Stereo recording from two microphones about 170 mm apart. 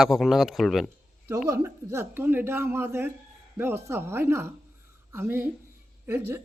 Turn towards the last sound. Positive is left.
turn(degrees=-15)  # may be behind; listen again after turning